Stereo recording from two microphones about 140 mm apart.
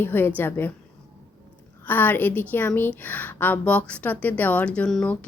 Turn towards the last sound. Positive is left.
turn(degrees=5)  # may be behind; listen again after turning